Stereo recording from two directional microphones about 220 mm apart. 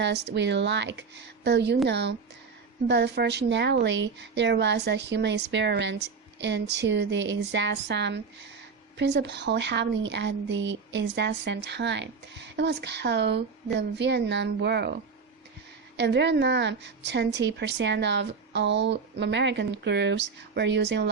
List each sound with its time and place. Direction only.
0.0 s a woman's voice: 50° right (ahead or behind)
16.0 s a woman's voice: 50° right (ahead or behind)